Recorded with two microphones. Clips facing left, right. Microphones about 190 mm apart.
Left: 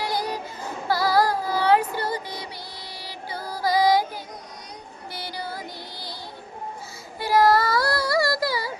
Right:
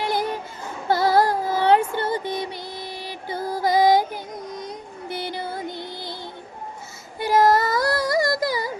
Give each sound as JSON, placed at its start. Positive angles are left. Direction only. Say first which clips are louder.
{"t": 0.0, "sound": "child singing", "louder": "right 3 dB", "side_deg": -20}
{"t": 3.0, "sound": "music", "louder": "right 4 dB", "side_deg": -20}
{"t": 5.0, "sound": "music", "louder": "right 5 dB", "side_deg": -20}
{"t": 7.2, "sound": "a sound", "louder": "right 1 dB", "side_deg": -20}